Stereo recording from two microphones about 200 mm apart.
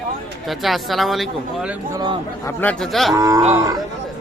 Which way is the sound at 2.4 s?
5° left (ahead or behind).